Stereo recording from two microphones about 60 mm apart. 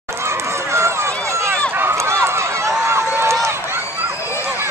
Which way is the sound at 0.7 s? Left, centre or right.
Right.